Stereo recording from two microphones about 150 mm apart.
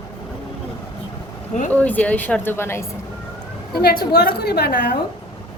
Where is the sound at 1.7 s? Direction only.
10° left (ahead or behind).